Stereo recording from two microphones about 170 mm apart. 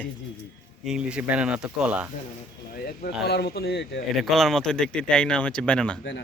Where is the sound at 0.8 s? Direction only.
5° right (ahead or behind).